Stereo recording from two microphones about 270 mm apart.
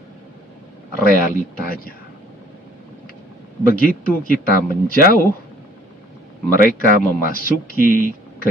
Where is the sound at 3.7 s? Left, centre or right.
Left.